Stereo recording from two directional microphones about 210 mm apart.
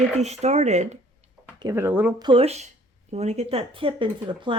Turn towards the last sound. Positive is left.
turn(degrees=-25)  # may be behind; listen again after turning